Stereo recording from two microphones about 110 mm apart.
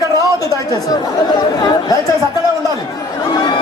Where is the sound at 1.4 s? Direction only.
35° left (ahead or behind).